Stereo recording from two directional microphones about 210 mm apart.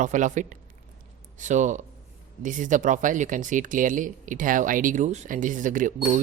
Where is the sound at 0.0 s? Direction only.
35° right (ahead or behind).